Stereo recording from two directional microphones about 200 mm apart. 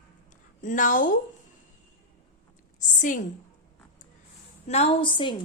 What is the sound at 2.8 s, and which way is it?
Speech, 40° left (ahead or behind).